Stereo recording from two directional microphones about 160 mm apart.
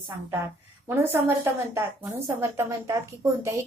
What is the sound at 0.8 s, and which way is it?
A woman's voice, 15° right (ahead or behind).